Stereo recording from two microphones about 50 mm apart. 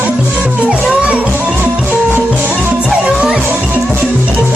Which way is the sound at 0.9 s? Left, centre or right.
Right.